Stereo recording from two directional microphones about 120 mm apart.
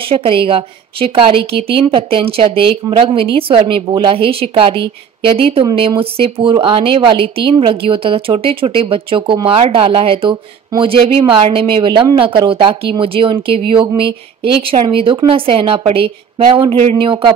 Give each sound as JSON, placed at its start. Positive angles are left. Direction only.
{"t": 0.0, "sound": "a woman's voice", "side_deg": -50}
{"t": 5.9, "sound": "a woman's voice", "side_deg": -50}